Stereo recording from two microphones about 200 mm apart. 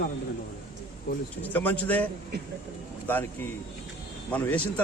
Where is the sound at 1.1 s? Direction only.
50° left (ahead or behind).